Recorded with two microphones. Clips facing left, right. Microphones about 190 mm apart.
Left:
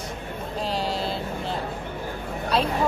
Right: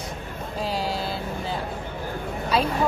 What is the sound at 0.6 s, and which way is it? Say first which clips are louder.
Vehicle: even; centre (ahead or behind).